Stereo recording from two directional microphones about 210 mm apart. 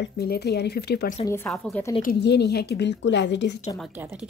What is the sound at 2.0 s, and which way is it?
A woman's voice, 50° left (ahead or behind).